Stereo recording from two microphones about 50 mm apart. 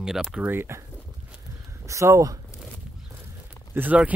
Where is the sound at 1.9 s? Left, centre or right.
Right.